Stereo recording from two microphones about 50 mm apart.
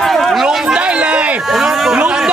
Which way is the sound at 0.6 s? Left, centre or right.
Centre.